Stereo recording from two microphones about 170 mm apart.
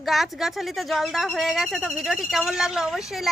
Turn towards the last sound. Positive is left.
turn(degrees=0)  # may be behind; listen again after turning